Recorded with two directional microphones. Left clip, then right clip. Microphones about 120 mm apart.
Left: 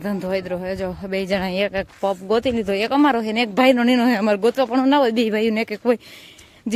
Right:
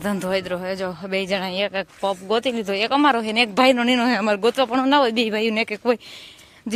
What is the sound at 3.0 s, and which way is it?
Speech, 25° left (ahead or behind).